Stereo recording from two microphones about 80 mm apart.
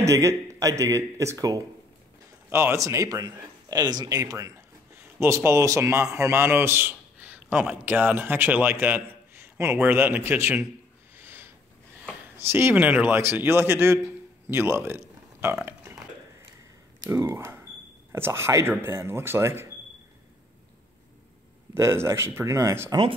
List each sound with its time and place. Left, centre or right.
0.0 s speech: right
2.5 s speech: right
5.2 s a man's voice: right
11.1 s sniff: right
12.4 s speech: right
12.7 s a man's voice: right
15.6 s burping: right
17.1 s speech: right
21.7 s speech: right
22.8 s speech: right